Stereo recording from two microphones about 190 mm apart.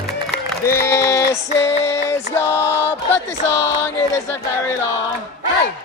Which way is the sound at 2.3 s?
15° left (ahead or behind).